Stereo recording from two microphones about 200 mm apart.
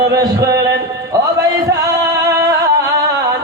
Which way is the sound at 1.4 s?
15° right (ahead or behind).